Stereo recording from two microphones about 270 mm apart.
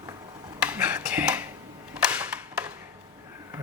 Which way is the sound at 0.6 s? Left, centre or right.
Centre.